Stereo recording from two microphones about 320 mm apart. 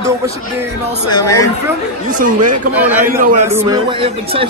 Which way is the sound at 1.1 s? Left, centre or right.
Centre.